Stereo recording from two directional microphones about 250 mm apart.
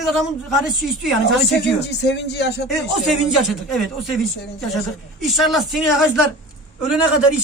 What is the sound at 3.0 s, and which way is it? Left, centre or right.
A woman's voice, centre.